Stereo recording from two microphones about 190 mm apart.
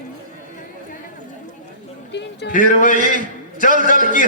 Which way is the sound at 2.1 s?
65° left (ahead or behind).